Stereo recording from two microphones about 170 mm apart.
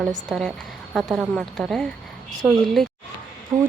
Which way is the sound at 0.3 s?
Centre (ahead or behind).